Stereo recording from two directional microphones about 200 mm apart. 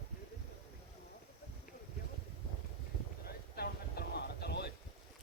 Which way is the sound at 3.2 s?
50° left (ahead or behind).